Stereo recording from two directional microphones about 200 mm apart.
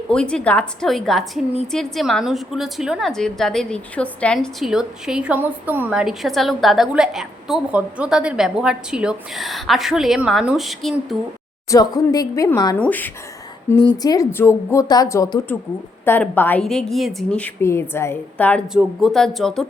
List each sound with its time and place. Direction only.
0.1 s a woman's voice: 5° left (ahead or behind)
11.7 s a woman's voice: 20° left (ahead or behind)
13.7 s a woman's voice: 20° left (ahead or behind); by 19.6 s centre (ahead or behind)